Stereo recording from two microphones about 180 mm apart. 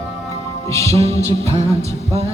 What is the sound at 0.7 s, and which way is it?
Music, 15° left (ahead or behind).